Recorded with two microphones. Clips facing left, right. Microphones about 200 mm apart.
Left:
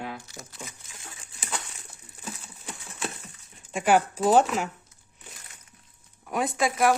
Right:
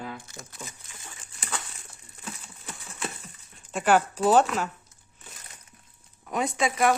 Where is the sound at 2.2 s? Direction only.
Centre (ahead or behind).